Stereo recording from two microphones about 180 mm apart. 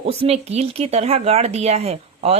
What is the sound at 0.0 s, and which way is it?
Speech, 35° right (ahead or behind).